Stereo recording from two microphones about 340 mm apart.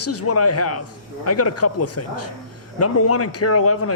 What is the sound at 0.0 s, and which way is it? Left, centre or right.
A man's voice, left.